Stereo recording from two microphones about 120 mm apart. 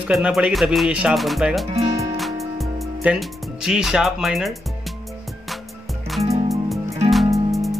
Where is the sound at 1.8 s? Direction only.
25° right (ahead or behind).